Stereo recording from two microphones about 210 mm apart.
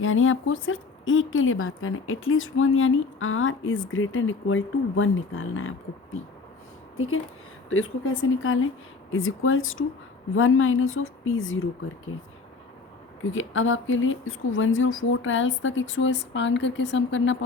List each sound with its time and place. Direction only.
0.0 s speech: 70° left (ahead or behind)
13.3 s speech: 70° left (ahead or behind)